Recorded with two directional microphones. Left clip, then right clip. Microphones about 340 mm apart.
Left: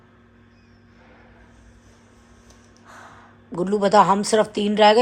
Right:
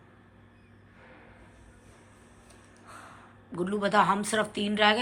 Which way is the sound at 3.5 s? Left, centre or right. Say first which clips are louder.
Left 9 dB; centre.